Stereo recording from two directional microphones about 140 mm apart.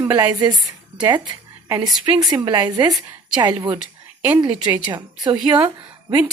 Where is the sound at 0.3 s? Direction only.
30° right (ahead or behind).